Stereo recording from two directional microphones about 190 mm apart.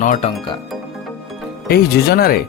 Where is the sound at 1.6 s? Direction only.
55° left (ahead or behind).